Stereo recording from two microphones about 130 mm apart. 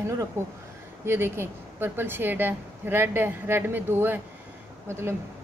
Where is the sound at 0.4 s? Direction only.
20° right (ahead or behind).